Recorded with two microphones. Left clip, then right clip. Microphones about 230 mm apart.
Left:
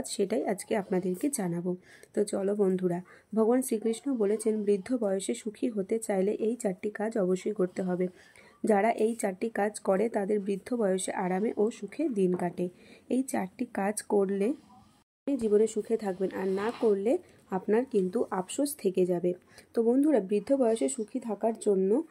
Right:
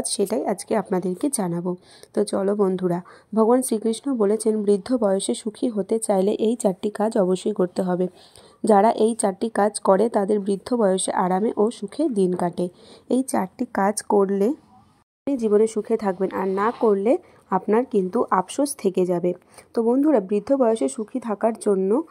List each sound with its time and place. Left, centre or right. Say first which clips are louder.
0.0 s speech: right 7 dB; centre
13.7 s speech: right 10 dB; centre